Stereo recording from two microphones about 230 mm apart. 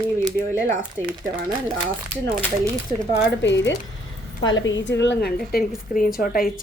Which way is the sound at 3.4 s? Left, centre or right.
Left.